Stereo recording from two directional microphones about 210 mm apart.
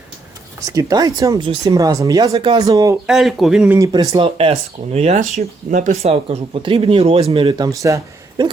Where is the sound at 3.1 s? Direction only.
Centre (ahead or behind).